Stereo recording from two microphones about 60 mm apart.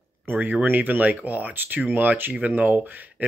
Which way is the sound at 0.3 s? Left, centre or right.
Right.